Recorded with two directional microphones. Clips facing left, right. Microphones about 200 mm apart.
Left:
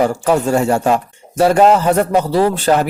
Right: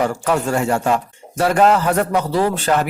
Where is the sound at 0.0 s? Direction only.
30° left (ahead or behind).